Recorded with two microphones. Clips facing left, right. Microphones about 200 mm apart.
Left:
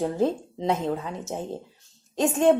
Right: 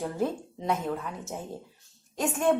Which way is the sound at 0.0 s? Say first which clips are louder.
Left 5 dB; 25° left (ahead or behind).